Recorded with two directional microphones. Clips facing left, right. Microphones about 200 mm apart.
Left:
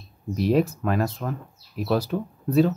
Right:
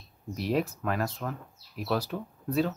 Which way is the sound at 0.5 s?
30° left (ahead or behind).